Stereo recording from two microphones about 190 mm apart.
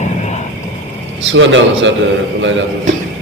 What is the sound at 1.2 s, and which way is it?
A man's voice, 80° right.